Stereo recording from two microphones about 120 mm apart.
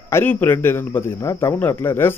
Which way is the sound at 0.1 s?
15° left (ahead or behind).